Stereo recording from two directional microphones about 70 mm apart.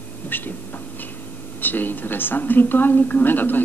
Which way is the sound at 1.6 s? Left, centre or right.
Left.